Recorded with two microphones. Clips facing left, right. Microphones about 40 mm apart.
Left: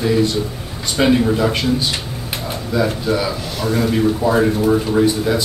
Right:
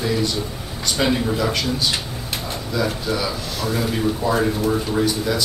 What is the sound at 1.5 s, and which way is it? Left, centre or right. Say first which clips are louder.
Speech: left 4 dB; left.